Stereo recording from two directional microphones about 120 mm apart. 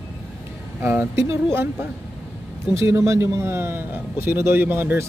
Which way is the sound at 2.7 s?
25° right (ahead or behind).